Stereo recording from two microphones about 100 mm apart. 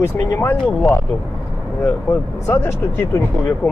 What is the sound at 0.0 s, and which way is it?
Speech, 25° left (ahead or behind).